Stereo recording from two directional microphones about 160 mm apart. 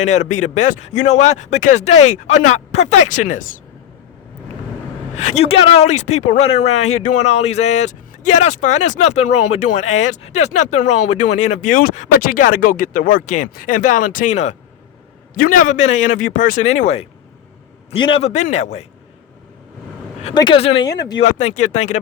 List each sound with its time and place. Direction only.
0.0 s speech: 45° left (ahead or behind)
5.1 s speech: 45° left (ahead or behind)
15.4 s speech: 60° left (ahead or behind)
17.9 s a man's voice: 35° left (ahead or behind)
20.3 s a man's voice: 30° left (ahead or behind)
21.2 s speech: 50° left (ahead or behind)